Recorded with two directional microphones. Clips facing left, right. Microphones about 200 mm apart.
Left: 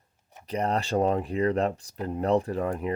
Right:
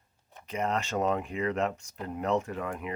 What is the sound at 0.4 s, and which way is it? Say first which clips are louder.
Speech: left 3 dB; 35° left (ahead or behind).